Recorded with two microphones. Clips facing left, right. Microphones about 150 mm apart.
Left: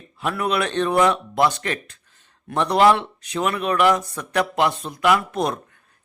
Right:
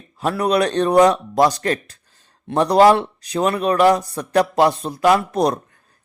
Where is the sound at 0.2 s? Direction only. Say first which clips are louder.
Right 5 dB; 35° right (ahead or behind).